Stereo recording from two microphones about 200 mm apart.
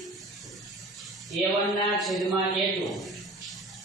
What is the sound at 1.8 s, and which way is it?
A man's voice, centre (ahead or behind).